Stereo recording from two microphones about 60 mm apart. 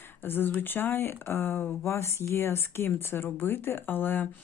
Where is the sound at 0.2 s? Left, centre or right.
Left.